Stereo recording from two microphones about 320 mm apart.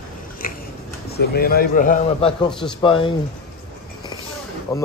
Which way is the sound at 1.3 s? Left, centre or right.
Left.